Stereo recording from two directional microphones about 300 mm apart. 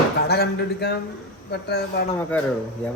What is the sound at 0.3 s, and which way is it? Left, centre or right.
Speech, left.